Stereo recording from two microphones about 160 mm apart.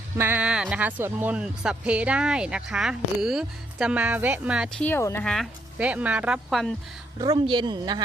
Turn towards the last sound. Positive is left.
turn(degrees=-25)  # may be behind; listen again after turning